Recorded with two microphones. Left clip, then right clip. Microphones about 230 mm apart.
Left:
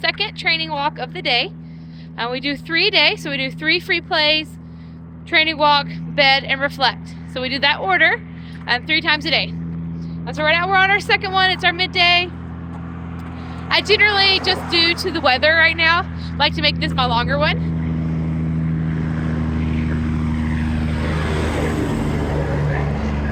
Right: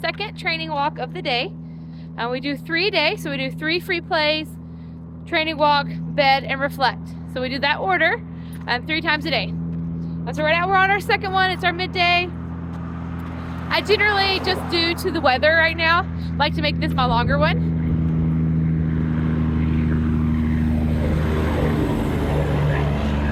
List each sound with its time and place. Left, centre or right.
0.0 s speech: centre
13.7 s speech: centre
17.6 s vehicle: left
22.7 s vehicle: centre